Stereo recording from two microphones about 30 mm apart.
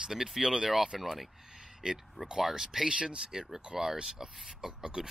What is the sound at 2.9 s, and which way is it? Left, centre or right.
Speech, right.